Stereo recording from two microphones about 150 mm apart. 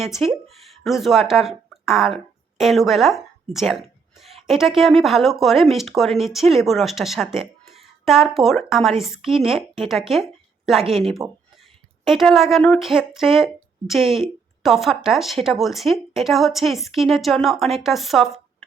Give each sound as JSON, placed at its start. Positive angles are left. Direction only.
{"t": 0.0, "sound": "a woman's voice", "side_deg": 0}
{"t": 11.2, "sound": "speech", "side_deg": -20}
{"t": 12.0, "sound": "speech", "side_deg": 0}